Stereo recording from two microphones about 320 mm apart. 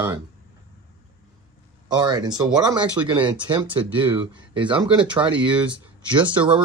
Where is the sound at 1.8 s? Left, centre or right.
Centre.